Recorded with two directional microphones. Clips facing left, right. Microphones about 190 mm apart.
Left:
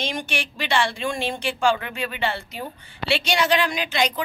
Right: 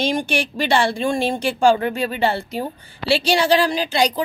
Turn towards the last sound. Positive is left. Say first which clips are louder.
# right 5 dB
turn(degrees=-35)  # may be behind; listen again after turning